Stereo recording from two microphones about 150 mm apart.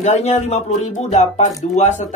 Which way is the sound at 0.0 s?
50° left (ahead or behind).